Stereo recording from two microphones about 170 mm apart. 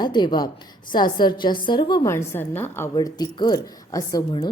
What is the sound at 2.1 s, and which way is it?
A woman's voice, 15° left (ahead or behind).